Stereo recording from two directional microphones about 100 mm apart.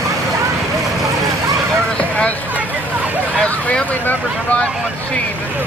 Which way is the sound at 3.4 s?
15° left (ahead or behind).